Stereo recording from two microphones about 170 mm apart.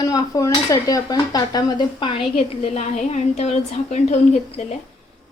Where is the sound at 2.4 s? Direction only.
40° left (ahead or behind).